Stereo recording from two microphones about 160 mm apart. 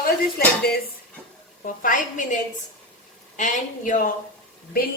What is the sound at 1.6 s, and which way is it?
Speech, 55° left (ahead or behind).